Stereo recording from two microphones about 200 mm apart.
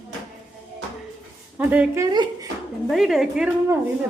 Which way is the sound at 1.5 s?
10° right (ahead or behind).